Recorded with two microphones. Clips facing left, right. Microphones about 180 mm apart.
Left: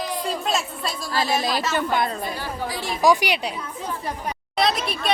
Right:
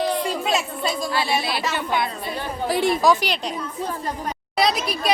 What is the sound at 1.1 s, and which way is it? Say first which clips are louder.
Speech: left 1 dB; 40° left (ahead or behind).